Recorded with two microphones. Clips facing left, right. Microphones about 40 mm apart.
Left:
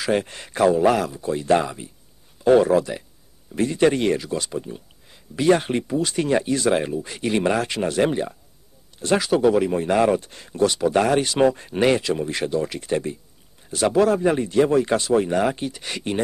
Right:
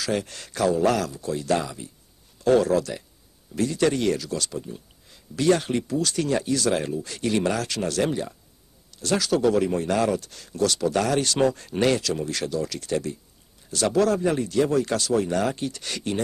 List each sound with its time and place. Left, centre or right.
0.0 s speech: left